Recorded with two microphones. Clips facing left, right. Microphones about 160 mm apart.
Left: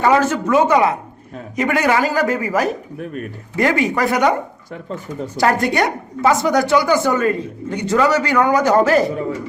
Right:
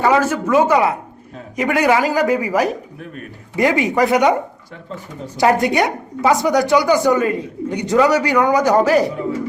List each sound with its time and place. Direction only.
0.0 s a woman's voice: 10° right (ahead or behind)
5.4 s a woman's voice: 15° right (ahead or behind)